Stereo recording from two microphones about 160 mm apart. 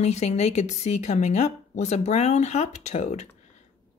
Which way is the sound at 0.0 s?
45° left (ahead or behind).